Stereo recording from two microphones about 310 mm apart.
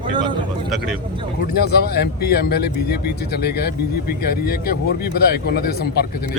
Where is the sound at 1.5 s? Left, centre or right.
Left.